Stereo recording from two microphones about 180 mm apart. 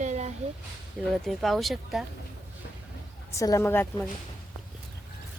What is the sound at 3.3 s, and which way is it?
Speech, 20° left (ahead or behind).